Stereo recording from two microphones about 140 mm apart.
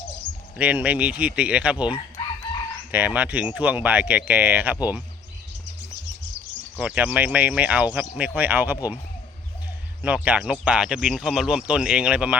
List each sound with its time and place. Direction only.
0.5 s speech: 10° right (ahead or behind)
6.7 s speech: 10° right (ahead or behind)
10.2 s speech: 5° right (ahead or behind)